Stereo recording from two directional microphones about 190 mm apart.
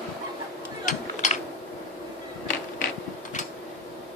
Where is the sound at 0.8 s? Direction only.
40° left (ahead or behind).